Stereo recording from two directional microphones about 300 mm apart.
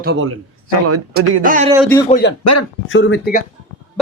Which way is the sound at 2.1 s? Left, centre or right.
Left.